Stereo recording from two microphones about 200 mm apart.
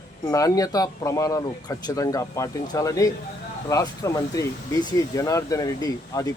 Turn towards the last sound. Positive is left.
turn(degrees=15)  # may be behind; listen again after turning